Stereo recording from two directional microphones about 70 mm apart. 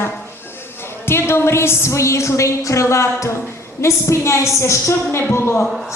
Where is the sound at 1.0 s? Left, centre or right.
Left.